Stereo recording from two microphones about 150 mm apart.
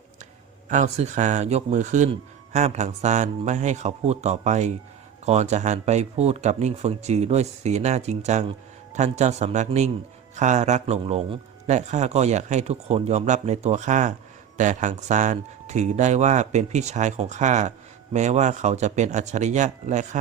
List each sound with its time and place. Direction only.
0.7 s speech: 50° right (ahead or behind)